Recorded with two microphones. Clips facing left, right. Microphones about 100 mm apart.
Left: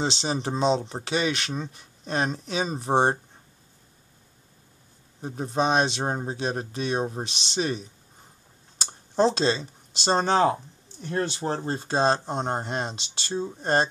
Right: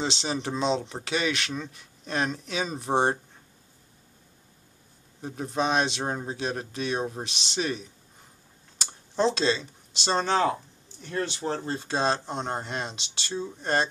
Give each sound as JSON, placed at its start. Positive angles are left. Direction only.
{"t": 0.0, "sound": "speech", "side_deg": 35}
{"t": 5.2, "sound": "speech", "side_deg": 30}
{"t": 11.0, "sound": "speech", "side_deg": 40}